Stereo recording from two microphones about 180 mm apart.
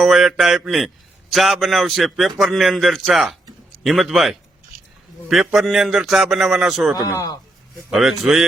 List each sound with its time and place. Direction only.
0.0 s a man's voice: centre (ahead or behind)
6.9 s a man's voice: 20° left (ahead or behind)
7.9 s a man's voice: centre (ahead or behind)